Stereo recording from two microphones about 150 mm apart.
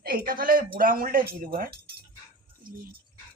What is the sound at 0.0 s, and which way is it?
Speech, 75° right (ahead or behind).